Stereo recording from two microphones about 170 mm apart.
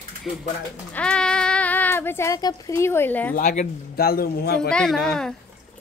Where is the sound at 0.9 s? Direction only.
5° left (ahead or behind).